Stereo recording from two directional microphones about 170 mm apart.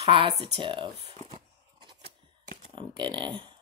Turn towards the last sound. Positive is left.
turn(degrees=-30)  # may be behind; listen again after turning